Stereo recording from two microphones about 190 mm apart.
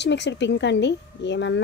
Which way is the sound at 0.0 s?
65° left (ahead or behind).